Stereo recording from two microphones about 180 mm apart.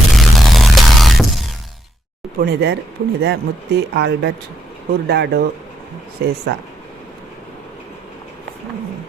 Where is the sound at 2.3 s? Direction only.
65° right (ahead or behind).